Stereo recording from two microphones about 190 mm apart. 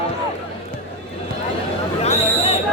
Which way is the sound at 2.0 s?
35° left (ahead or behind).